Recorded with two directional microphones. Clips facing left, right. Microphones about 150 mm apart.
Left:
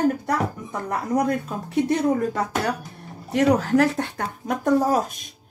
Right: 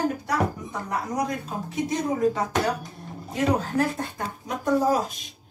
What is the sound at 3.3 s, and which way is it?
Speech, 80° left.